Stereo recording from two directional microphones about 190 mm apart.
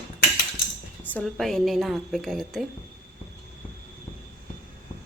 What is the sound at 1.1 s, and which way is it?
A woman's voice, 5° left (ahead or behind).